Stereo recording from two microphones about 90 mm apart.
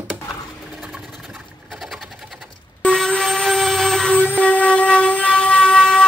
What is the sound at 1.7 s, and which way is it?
Sewing machine, centre (ahead or behind).